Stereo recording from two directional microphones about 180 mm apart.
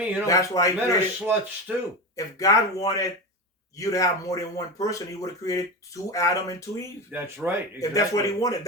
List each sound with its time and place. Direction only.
0.0 s a man's voice: 10° right (ahead or behind)
0.3 s speech: 20° left (ahead or behind)
1.2 s speech: 5° right (ahead or behind)
2.1 s speech: 20° left (ahead or behind)
7.1 s speech: 10° right (ahead or behind)
7.8 s speech: 20° left (ahead or behind)